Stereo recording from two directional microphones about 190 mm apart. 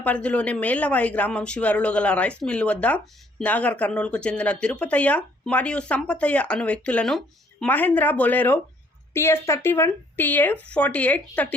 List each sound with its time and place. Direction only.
0.0 s speech: 5° left (ahead or behind)